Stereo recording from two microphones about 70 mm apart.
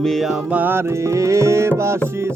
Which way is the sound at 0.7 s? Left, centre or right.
Right.